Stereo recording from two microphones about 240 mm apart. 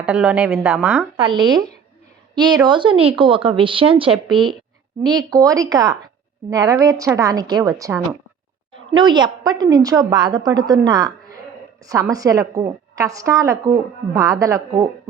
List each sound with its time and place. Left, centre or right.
0.0 s a woman's voice: centre
1.1 s a woman's voice: centre